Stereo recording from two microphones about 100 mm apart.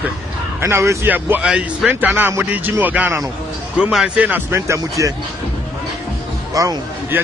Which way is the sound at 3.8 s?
5° right (ahead or behind).